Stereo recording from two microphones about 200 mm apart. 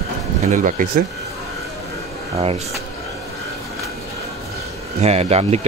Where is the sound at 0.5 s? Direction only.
40° right (ahead or behind).